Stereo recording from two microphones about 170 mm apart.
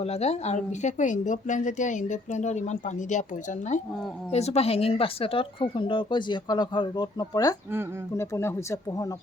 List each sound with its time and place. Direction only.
0.0 s speech: 40° left (ahead or behind)
4.3 s speech: 40° left (ahead or behind); by 9.1 s 20° left (ahead or behind)